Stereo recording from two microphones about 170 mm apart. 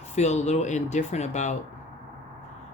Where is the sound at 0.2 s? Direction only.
40° left (ahead or behind).